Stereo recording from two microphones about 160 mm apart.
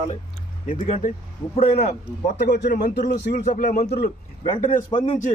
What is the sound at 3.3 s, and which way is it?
A man's voice, 50° left (ahead or behind).